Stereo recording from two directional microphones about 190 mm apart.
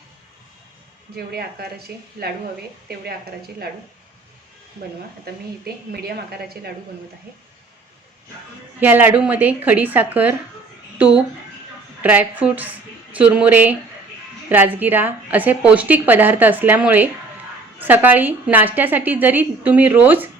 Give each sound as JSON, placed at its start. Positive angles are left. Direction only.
{"t": 1.1, "sound": "a woman's voice", "side_deg": -55}
{"t": 5.2, "sound": "a woman's voice", "side_deg": -55}
{"t": 8.8, "sound": "a woman's voice", "side_deg": -10}